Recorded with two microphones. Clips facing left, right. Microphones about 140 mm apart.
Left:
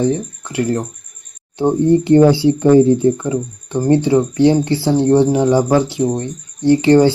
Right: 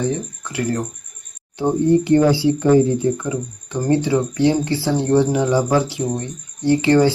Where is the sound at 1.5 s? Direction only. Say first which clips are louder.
Left 3 dB; 25° left (ahead or behind).